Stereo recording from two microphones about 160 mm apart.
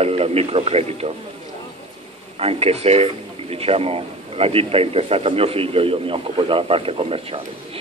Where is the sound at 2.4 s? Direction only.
40° right (ahead or behind).